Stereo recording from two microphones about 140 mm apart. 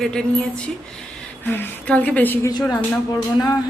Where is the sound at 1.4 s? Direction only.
15° left (ahead or behind).